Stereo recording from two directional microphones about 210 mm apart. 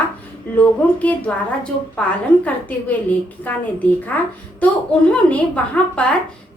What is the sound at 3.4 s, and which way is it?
A woman's voice, 5° left (ahead or behind).